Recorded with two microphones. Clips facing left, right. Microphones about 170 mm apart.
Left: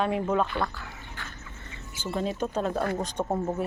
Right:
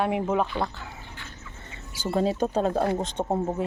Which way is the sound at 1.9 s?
35° right (ahead or behind).